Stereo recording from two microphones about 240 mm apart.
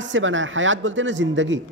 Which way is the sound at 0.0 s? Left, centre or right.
Right.